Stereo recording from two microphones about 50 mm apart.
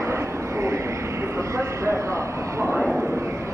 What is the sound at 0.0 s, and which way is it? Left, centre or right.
Vehicle, right.